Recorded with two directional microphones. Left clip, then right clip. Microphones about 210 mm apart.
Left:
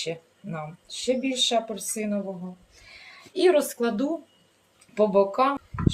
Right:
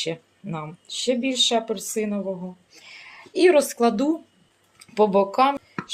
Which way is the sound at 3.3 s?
40° right (ahead or behind).